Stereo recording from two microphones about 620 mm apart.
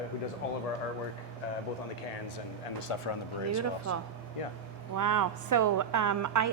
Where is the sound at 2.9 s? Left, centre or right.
Left.